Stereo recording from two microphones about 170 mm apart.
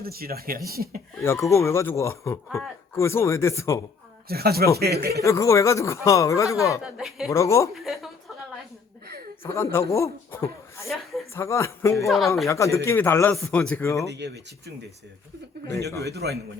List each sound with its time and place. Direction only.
0.0 s speech: 60° right (ahead or behind)
1.2 s a man's voice: 15° left (ahead or behind)
4.3 s speech: 65° right (ahead or behind)
5.2 s a man's voice: 15° left (ahead or behind)
6.8 s speech: 5° right (ahead or behind)
7.3 s a man's voice: 20° left (ahead or behind)
7.7 s speech: centre (ahead or behind)
9.7 s a man's voice: 15° left (ahead or behind)
10.8 s a woman's voice: centre (ahead or behind)
11.3 s a man's voice: 15° left (ahead or behind)
14.1 s speech: 85° right
15.9 s a man's voice: 20° left (ahead or behind)
16.1 s a man's voice: 70° right (ahead or behind)